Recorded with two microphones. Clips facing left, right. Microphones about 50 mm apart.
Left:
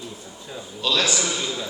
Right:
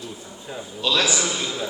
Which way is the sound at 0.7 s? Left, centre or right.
Centre.